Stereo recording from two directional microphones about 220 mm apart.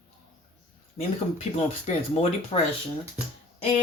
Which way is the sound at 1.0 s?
30° left (ahead or behind).